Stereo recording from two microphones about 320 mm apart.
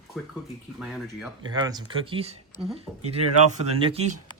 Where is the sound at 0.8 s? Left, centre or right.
Centre.